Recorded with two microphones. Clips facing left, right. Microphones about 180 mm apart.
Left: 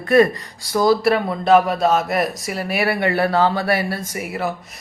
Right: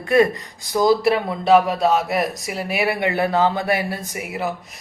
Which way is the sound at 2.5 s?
15° right (ahead or behind).